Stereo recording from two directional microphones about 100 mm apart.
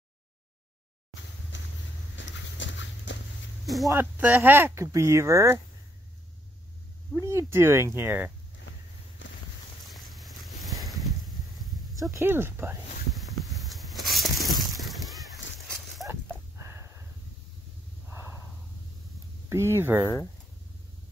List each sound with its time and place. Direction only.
3.6 s speech: centre (ahead or behind)
3.9 s speech: 20° right (ahead or behind)
7.2 s speech: 30° right (ahead or behind)
9.8 s boat: centre (ahead or behind)
12.1 s speech: 25° right (ahead or behind)
13.1 s a sound: centre (ahead or behind)
16.1 s a sound: 25° right (ahead or behind)
18.1 s snort: 25° right (ahead or behind)
19.5 s speech: 25° right (ahead or behind)